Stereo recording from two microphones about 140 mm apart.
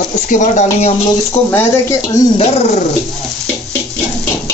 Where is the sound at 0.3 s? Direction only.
60° left (ahead or behind).